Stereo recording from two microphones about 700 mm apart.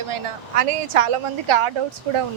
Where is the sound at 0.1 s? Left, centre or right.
Right.